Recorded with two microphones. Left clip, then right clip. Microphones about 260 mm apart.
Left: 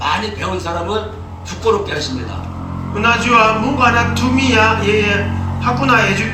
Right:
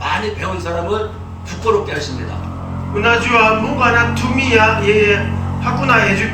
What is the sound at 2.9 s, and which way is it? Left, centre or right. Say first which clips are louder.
Speech: left 1 dB; left.